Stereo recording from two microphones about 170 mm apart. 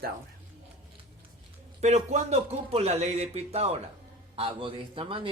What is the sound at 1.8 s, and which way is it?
A man's voice, 40° right (ahead or behind).